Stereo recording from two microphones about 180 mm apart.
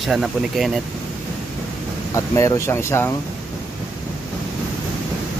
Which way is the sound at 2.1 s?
15° left (ahead or behind).